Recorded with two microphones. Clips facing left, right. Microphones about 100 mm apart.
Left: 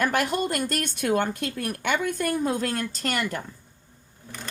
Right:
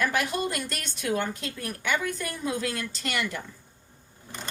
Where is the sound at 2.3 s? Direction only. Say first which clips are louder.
Left 5 dB; 45° left (ahead or behind).